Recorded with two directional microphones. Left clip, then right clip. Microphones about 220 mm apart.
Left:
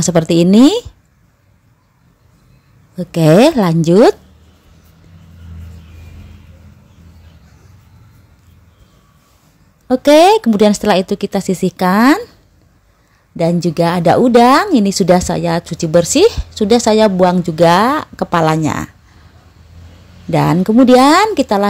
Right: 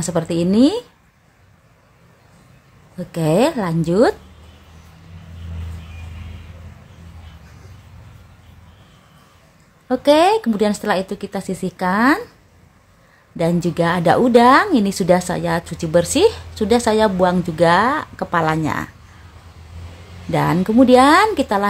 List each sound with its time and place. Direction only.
0.0 s speech: 35° left (ahead or behind)
3.0 s speech: 35° left (ahead or behind)
9.8 s speech: 30° left (ahead or behind)
13.4 s a woman's voice: 25° left (ahead or behind)
20.2 s a woman's voice: 30° left (ahead or behind)